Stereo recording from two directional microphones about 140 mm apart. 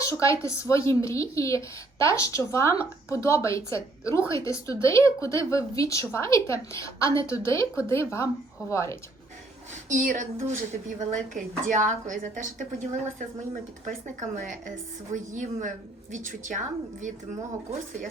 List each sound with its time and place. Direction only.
0.0 s a woman's voice: 20° left (ahead or behind)
9.9 s a woman's voice: 70° right (ahead or behind)